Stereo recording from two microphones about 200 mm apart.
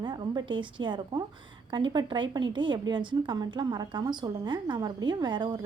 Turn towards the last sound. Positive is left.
turn(degrees=-20)  # may be behind; listen again after turning